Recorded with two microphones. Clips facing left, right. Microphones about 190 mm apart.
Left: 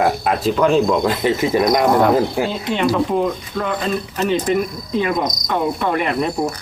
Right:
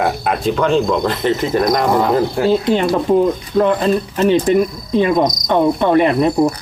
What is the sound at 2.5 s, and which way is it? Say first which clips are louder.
Cricket: right 5 dB; 40° right (ahead or behind).